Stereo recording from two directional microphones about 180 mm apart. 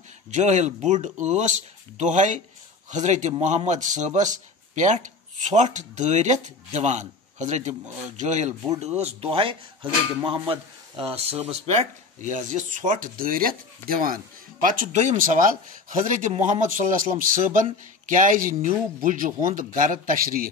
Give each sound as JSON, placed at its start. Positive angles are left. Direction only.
{"t": 0.3, "sound": "a man's voice", "side_deg": -40}